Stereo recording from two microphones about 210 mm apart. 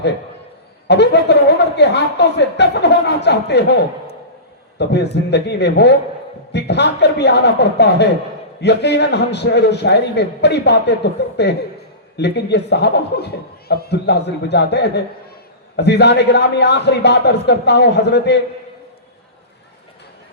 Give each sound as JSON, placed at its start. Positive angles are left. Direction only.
{"t": 0.9, "sound": "speech", "side_deg": 55}
{"t": 4.8, "sound": "speech", "side_deg": 55}